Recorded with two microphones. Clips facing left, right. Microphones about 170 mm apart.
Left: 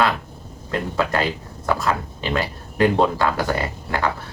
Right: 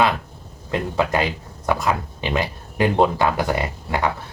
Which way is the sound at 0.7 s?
15° right (ahead or behind).